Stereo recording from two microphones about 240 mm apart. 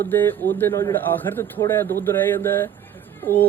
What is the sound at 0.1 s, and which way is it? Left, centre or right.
Speech, centre.